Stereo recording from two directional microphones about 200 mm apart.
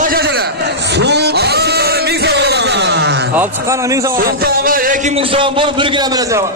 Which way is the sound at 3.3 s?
10° right (ahead or behind).